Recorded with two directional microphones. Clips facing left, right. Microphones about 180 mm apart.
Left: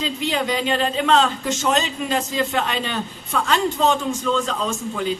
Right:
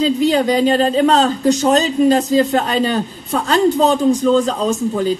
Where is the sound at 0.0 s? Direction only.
40° right (ahead or behind).